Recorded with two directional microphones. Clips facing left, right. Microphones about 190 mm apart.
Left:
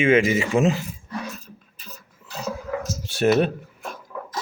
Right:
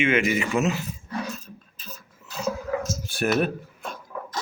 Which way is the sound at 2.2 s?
35° left (ahead or behind).